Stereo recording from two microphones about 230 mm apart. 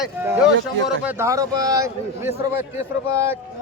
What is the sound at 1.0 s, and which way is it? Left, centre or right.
A man's voice, centre.